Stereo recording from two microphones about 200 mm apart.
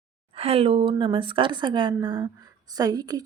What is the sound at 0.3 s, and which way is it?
A woman's voice, 30° right (ahead or behind).